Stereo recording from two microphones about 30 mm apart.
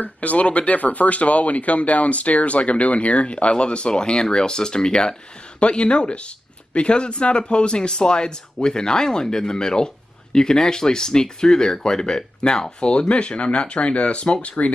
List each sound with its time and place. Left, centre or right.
0.0 s speech: left
5.6 s speech: left
13.1 s speech: left